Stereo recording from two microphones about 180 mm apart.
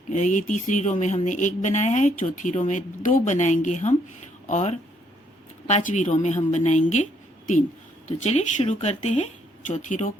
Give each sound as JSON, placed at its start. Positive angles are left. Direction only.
{"t": 0.1, "sound": "speech", "side_deg": 45}